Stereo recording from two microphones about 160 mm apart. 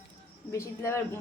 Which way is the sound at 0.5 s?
15° left (ahead or behind).